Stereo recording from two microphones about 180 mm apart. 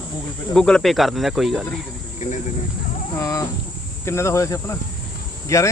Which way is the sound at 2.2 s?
45° left (ahead or behind).